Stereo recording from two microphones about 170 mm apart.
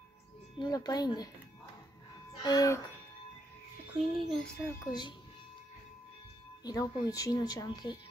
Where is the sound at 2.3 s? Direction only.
25° left (ahead or behind).